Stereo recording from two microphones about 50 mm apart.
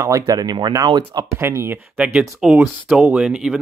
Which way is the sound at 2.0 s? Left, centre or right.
Right.